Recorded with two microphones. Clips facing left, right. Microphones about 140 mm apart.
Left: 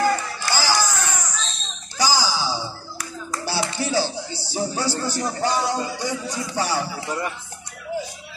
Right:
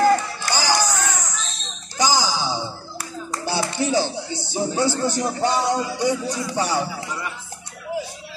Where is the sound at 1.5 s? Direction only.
20° right (ahead or behind).